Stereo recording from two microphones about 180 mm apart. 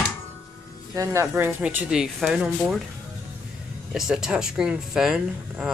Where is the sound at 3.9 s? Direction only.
5° right (ahead or behind).